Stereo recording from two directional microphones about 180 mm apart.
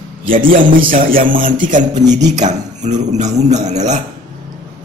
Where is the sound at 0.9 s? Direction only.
50° right (ahead or behind).